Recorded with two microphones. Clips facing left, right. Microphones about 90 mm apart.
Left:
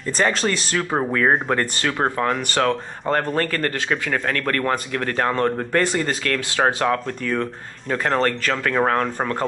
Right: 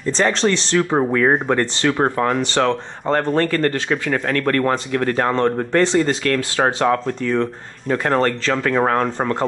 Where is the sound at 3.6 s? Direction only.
20° right (ahead or behind).